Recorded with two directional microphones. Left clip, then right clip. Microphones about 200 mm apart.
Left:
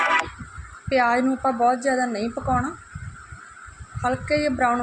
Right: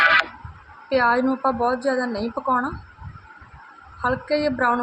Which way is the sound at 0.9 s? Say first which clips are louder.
Right 1 dB; 15° left (ahead or behind).